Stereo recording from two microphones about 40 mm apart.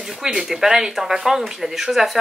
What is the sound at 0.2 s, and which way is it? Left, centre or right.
Speech, centre.